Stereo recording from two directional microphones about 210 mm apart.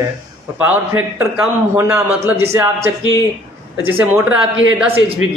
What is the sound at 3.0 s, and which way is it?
Speech, 15° left (ahead or behind).